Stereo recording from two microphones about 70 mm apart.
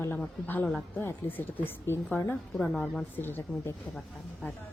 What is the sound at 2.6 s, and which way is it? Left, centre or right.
Speech, centre.